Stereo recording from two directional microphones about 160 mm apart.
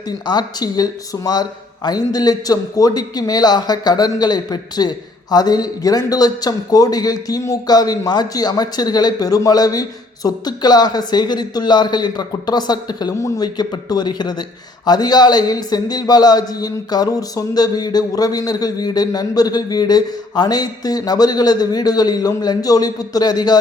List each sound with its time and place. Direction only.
0.3 s a man's voice: 25° left (ahead or behind)